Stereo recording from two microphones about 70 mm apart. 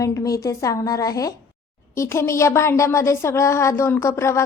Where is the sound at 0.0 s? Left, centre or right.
Left.